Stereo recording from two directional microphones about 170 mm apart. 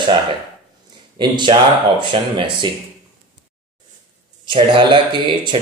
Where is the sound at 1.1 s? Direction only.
25° right (ahead or behind).